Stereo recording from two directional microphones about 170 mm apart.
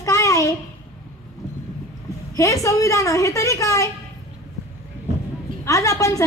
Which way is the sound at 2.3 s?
20° left (ahead or behind).